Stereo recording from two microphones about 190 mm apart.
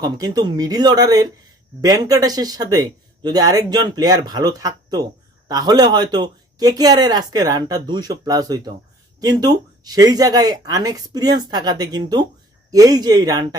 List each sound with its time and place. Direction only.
0.0 s speech: 20° right (ahead or behind)